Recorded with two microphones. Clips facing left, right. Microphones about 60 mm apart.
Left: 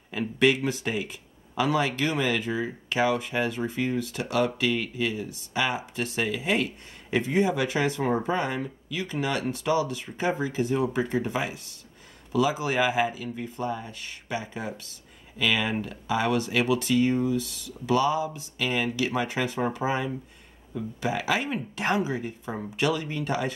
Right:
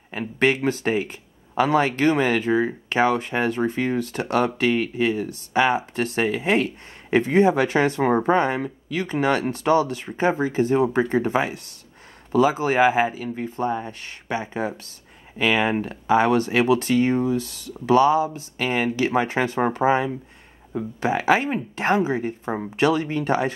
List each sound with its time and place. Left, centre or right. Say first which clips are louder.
0.4 s speech: right 3 dB; right